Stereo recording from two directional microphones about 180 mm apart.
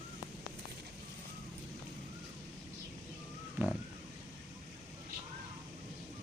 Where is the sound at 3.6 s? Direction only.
10° right (ahead or behind).